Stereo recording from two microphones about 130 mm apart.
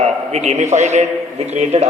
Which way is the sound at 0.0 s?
60° right (ahead or behind).